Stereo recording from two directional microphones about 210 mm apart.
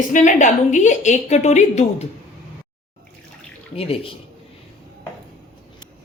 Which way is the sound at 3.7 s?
30° left (ahead or behind).